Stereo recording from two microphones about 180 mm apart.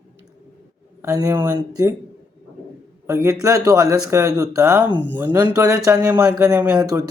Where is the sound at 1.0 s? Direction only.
20° right (ahead or behind).